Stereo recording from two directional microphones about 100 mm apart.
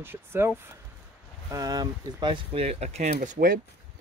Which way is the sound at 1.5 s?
40° right (ahead or behind).